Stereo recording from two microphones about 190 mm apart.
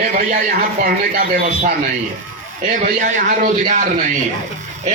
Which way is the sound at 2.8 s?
45° right (ahead or behind).